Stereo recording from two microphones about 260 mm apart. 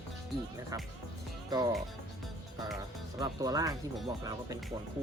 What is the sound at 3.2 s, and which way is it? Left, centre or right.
Speech, centre.